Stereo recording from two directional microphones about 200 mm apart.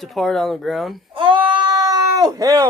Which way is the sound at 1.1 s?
25° right (ahead or behind).